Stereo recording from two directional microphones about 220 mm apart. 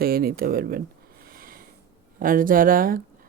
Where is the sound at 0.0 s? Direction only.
45° right (ahead or behind).